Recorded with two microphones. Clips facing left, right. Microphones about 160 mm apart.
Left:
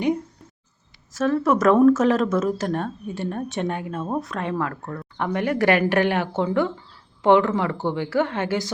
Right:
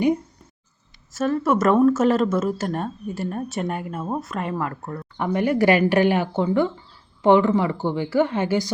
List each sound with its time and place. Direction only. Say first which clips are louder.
1.2 s speech: left 1 dB; 5° right (ahead or behind)